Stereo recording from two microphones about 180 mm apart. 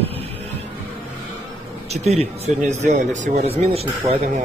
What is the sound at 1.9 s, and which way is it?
Speech, 35° right (ahead or behind).